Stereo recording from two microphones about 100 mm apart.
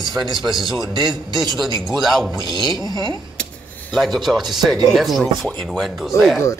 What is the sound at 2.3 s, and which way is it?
Speech, 50° right (ahead or behind).